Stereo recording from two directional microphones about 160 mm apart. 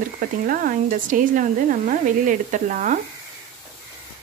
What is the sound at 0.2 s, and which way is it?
Speech, 60° right (ahead or behind).